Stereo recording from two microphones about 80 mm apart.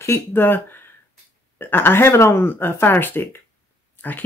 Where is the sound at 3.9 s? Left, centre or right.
Left.